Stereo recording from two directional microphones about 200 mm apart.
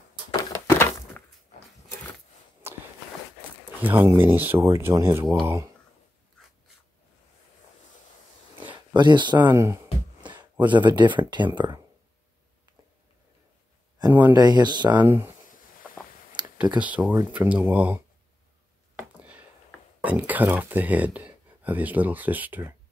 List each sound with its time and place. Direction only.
0.3 s a sound: 15° left (ahead or behind)
2.6 s walk: 10° right (ahead or behind)
3.8 s speech: 10° right (ahead or behind)
8.9 s speech: 20° right (ahead or behind)
14.3 s speech: 20° right (ahead or behind)
15.0 s speech: 10° right (ahead or behind)
16.7 s speech: 5° right (ahead or behind)
18.9 s a sound: 5° right (ahead or behind)
20.0 s speech: 10° right (ahead or behind)